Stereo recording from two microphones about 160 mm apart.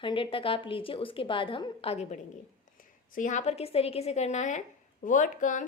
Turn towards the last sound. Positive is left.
turn(degrees=55)  # may be behind; listen again after turning